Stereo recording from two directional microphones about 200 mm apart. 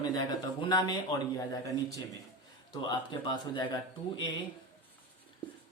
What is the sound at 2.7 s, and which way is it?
Speech, 20° left (ahead or behind).